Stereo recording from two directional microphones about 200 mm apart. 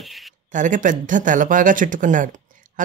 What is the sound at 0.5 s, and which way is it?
Speech, 40° right (ahead or behind).